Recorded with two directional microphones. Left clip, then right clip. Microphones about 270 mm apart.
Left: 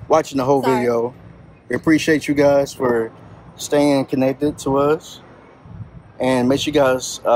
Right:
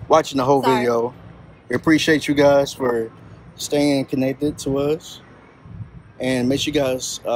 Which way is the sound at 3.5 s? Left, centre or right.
Left.